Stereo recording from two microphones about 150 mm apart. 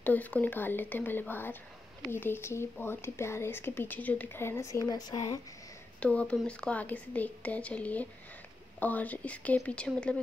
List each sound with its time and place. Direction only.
0.0 s speech: 10° left (ahead or behind); by 5.4 s 25° left (ahead or behind)
5.9 s speech: 10° left (ahead or behind)